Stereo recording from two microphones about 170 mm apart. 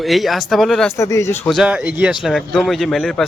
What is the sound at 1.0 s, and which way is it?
Speech, 15° left (ahead or behind).